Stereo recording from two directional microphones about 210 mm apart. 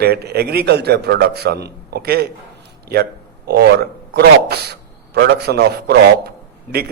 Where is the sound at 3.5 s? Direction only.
50° right (ahead or behind).